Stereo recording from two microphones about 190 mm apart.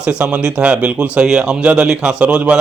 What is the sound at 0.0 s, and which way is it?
Speech, 5° right (ahead or behind).